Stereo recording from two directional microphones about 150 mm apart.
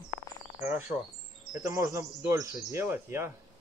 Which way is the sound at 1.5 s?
20° right (ahead or behind).